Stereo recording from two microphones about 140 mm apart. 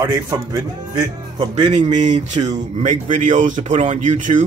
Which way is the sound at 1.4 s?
50° right (ahead or behind).